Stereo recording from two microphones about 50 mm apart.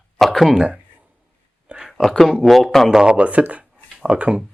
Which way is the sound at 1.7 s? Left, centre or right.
Right.